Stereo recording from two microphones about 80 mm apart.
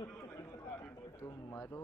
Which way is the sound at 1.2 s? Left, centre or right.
Left.